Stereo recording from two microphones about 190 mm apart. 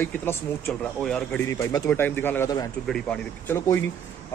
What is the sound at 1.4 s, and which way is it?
A man's voice, 15° left (ahead or behind).